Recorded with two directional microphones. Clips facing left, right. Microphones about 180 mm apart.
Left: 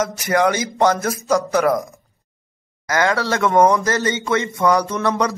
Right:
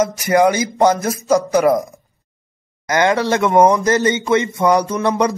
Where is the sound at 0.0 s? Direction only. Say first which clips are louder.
Right 4 dB; 15° right (ahead or behind).